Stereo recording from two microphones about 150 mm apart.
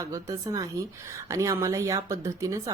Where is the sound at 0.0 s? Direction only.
25° right (ahead or behind).